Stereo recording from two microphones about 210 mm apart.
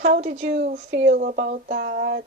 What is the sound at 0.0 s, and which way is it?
Speech, 35° right (ahead or behind).